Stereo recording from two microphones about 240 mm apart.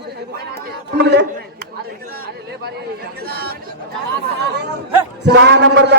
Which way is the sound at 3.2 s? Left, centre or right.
Right.